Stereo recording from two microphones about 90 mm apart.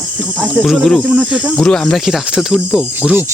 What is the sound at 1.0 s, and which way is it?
Speech, 10° right (ahead or behind).